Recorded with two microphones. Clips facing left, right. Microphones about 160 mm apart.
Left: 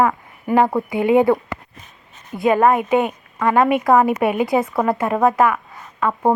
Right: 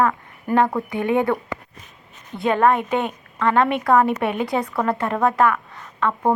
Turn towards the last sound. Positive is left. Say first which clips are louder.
# left 2 dB
turn(degrees=5)  # may be behind; listen again after turning